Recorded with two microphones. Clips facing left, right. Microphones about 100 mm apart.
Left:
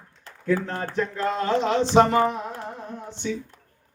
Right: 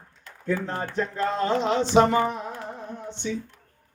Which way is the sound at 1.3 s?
Centre (ahead or behind).